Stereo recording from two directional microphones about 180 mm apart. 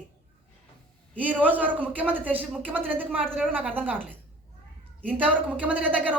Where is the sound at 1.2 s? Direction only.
10° right (ahead or behind).